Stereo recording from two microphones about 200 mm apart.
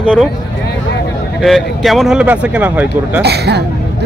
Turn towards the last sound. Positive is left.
turn(degrees=-55)  # may be behind; listen again after turning